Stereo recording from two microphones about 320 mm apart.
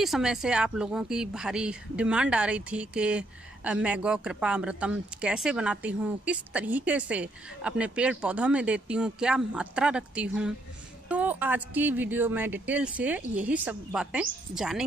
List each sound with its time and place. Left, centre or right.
0.0 s a woman's voice: centre